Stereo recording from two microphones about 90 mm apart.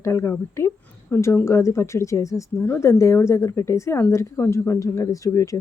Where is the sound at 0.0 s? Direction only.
35° left (ahead or behind).